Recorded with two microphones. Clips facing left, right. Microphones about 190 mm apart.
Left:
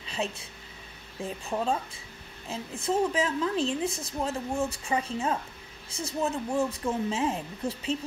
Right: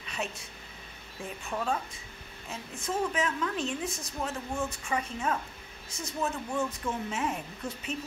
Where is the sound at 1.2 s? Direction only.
25° left (ahead or behind).